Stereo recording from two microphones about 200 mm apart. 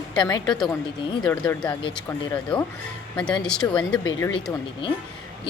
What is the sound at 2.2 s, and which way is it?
Speech, 25° left (ahead or behind).